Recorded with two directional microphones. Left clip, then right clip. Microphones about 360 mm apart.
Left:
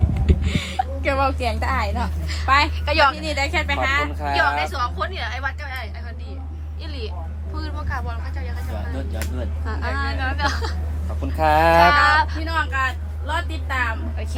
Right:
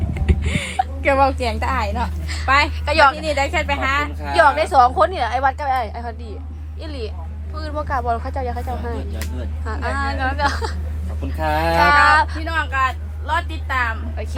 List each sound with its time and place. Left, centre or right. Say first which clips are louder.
0.1 s a sound: right 3 dB; centre
1.0 s a woman's voice: right 5 dB; right
2.2 s a sound: right 1 dB; centre
2.8 s a woman's voice: right 3 dB; centre
3.3 s a woman's voice: right 2 dB; right
4.2 s a woman's voice: right 9 dB; centre
9.6 s a woman's voice: right 4 dB; centre
12.5 s speech: right 3 dB; centre